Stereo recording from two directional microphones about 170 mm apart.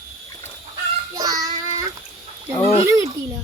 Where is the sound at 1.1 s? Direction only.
20° right (ahead or behind).